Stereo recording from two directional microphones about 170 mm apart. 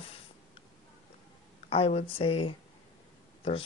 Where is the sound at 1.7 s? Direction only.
35° left (ahead or behind).